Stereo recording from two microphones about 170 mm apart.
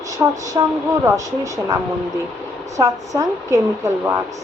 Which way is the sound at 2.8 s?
20° right (ahead or behind).